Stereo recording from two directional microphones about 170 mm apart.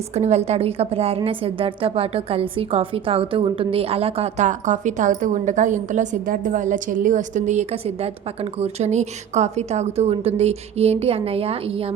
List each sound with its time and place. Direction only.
0.1 s a woman's voice: 40° right (ahead or behind)